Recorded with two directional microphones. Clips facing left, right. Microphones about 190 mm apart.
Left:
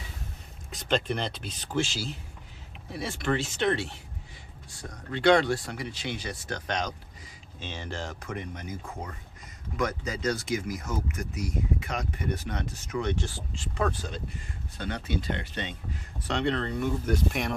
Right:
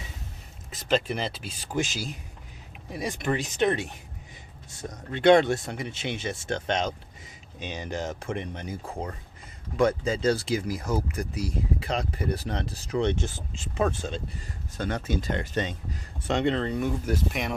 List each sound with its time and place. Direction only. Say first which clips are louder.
0.7 s speech: right 2 dB; 5° right (ahead or behind); by 14.2 s 25° right (ahead or behind)
14.8 s speech: right 3 dB; 45° right (ahead or behind)
16.2 s speech: right 3 dB; 20° right (ahead or behind)
17.1 s speech: even; centre (ahead or behind)